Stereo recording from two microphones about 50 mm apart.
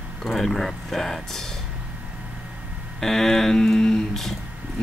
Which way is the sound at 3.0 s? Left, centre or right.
Centre.